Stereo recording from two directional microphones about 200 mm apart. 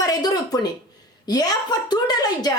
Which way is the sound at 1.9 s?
20° left (ahead or behind).